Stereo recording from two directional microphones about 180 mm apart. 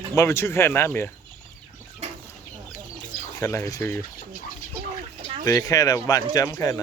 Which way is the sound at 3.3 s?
15° left (ahead or behind).